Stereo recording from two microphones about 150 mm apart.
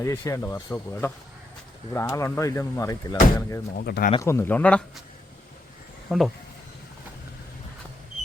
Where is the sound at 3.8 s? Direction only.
90° left.